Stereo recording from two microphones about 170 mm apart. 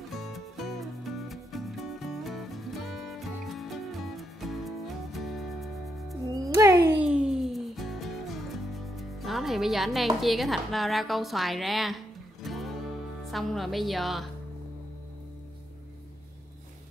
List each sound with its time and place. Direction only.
0.1 s music: centre (ahead or behind)
6.4 s a sound: 20° right (ahead or behind)
6.9 s music: 5° right (ahead or behind)
13.2 s a woman's voice: centre (ahead or behind)